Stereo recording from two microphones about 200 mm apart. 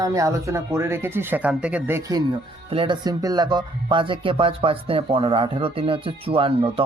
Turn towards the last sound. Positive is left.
turn(degrees=-25)  # may be behind; listen again after turning